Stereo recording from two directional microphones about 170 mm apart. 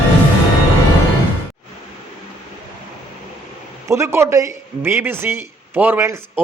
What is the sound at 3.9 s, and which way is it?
A man's voice, 15° right (ahead or behind).